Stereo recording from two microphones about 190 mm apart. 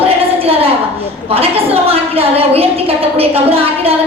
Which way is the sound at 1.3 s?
30° right (ahead or behind).